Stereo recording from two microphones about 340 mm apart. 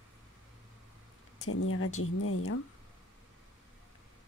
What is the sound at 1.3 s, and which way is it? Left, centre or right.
Speech, left.